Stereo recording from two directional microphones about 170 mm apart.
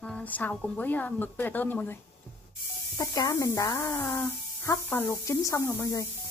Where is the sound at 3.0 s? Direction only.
20° left (ahead or behind).